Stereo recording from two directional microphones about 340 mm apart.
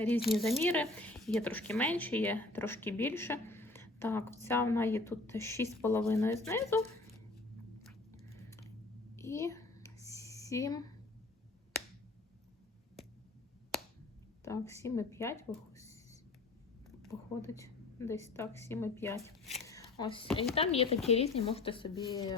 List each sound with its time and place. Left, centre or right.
0.3 s speech: centre
8.3 s typing: centre
9.1 s a sound: centre
14.4 s speech: centre
17.0 s a woman's voice: centre